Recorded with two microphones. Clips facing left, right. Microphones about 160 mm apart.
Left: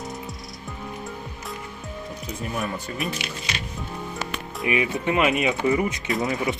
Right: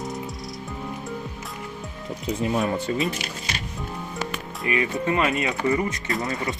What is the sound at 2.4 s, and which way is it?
Speech, 25° right (ahead or behind).